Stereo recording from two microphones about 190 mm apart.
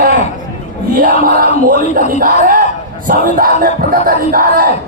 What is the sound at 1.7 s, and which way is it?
Speech, 45° right (ahead or behind).